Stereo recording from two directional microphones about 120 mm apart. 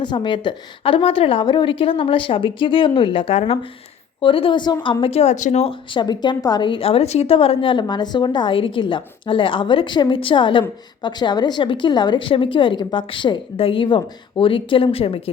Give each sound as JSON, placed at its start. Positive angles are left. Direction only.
{"t": 0.0, "sound": "a woman's voice", "side_deg": 40}
{"t": 3.3, "sound": "a woman's voice", "side_deg": 55}
{"t": 5.9, "sound": "a woman's voice", "side_deg": 40}